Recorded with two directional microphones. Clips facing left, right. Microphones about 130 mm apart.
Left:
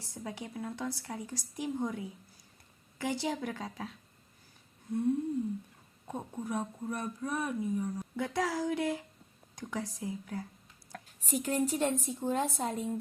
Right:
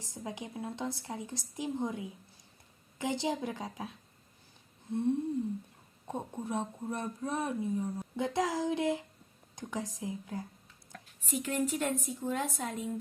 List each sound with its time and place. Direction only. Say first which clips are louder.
0.0 s a woman's voice: even; 15° right (ahead or behind)
10.9 s a woman's voice: left 2 dB; 40° left (ahead or behind)